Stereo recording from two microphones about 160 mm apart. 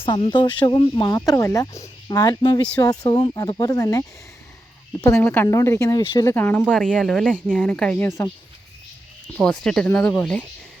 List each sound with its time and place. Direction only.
0.0 s speech: 30° left (ahead or behind)
6.3 s speech: 10° left (ahead or behind)
9.3 s speech: 5° left (ahead or behind)